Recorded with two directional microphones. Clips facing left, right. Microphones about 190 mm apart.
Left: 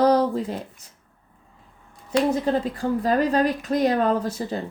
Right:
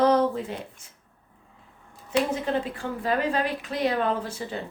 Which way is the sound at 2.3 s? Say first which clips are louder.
Left 4 dB; 40° left (ahead or behind).